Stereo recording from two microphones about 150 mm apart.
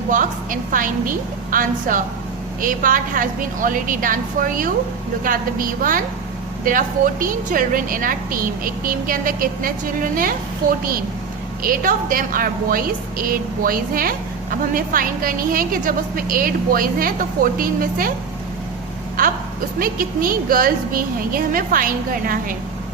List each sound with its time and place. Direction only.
0.1 s a woman's voice: 60° right (ahead or behind)
11.6 s a woman's voice: 70° right (ahead or behind)
19.8 s a woman's voice: 70° right (ahead or behind)